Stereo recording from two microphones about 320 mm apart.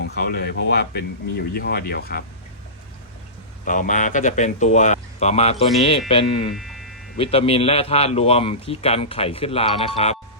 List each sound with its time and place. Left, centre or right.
0.0 s speech: left
3.7 s a man's voice: left
6.5 s a sound: centre
7.2 s a man's voice: centre